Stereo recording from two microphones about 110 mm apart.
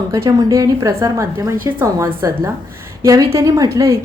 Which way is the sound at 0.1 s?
35° right (ahead or behind).